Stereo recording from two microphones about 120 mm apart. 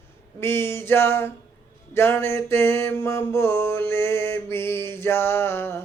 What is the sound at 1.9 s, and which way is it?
Mantra, 20° left (ahead or behind).